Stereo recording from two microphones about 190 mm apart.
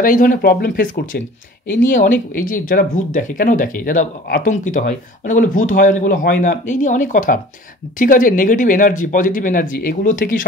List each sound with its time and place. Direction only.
0.0 s speech: 45° left (ahead or behind)